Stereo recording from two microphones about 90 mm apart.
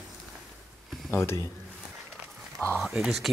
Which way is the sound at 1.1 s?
30° left (ahead or behind).